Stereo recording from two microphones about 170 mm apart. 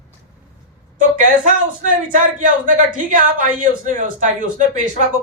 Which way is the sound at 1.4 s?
50° right (ahead or behind).